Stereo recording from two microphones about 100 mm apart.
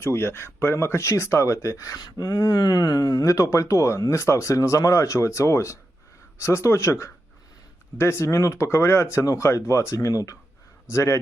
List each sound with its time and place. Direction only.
0.0 s speech: 25° left (ahead or behind)